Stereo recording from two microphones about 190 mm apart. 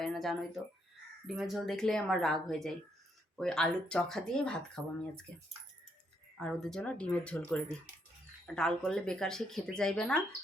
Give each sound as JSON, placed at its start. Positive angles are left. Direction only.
{"t": 0.0, "sound": "speech", "side_deg": 0}
{"t": 6.3, "sound": "speech", "side_deg": 0}